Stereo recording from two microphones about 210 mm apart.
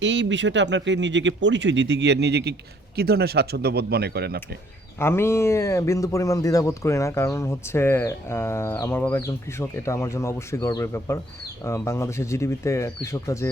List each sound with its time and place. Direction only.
0.0 s speech: 60° right (ahead or behind)
4.9 s speech: 10° left (ahead or behind)